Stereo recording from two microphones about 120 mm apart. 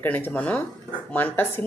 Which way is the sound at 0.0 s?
15° left (ahead or behind).